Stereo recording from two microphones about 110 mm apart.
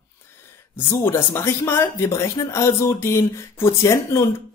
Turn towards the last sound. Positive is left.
turn(degrees=25)  # may be behind; listen again after turning